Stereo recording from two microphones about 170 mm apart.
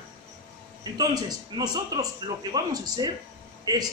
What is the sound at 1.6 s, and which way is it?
A woman's voice, 25° right (ahead or behind).